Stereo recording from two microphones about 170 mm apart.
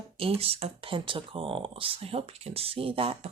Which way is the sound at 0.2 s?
35° right (ahead or behind).